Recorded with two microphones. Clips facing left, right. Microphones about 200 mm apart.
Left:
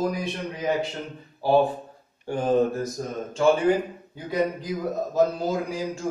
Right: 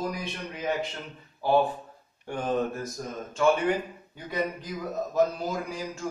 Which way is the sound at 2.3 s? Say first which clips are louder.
Left 6 dB; 30° left (ahead or behind).